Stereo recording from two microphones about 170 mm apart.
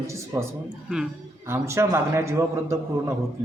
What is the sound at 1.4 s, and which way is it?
A man's voice, 15° right (ahead or behind).